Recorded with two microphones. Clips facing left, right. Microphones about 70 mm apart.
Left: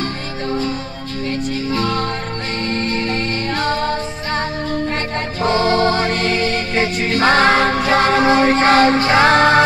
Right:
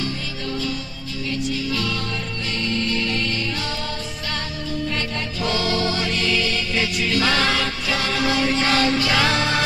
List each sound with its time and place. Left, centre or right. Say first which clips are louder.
0.0 s music: left 4 dB; left
5.4 s music: left 8 dB; left